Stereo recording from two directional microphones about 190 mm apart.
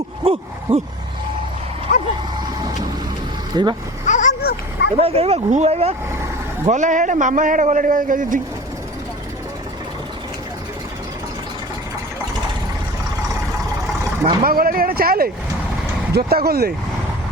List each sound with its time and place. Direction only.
0.2 s a sound: 30° right (ahead or behind)
0.7 s speech: 10° right (ahead or behind)
1.9 s dog: 40° left (ahead or behind)
3.5 s speech: 25° right (ahead or behind)
4.0 s a sound: 40° left (ahead or behind)
4.9 s a man's voice: 30° right (ahead or behind)
14.4 s speech: 50° right (ahead or behind)